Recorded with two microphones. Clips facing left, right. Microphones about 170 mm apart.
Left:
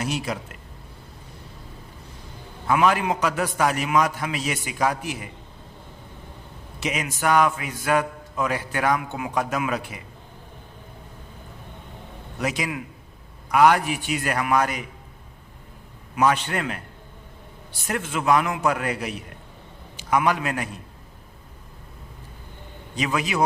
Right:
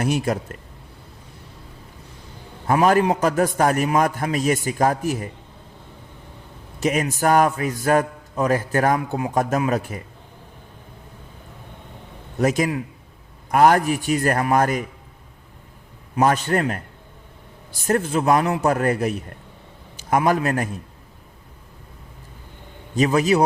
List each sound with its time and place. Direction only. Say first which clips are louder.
0.0 s a man's voice: right 6 dB; 50° right (ahead or behind)
2.6 s a man's voice: right 4 dB; 45° right (ahead or behind)
6.8 s a man's voice: right 5 dB; 45° right (ahead or behind)
12.4 s a man's voice: right 7 dB; 45° right (ahead or behind)
16.2 s a man's voice: right 3 dB; 40° right (ahead or behind)
23.0 s a man's voice: right 8 dB; 40° right (ahead or behind)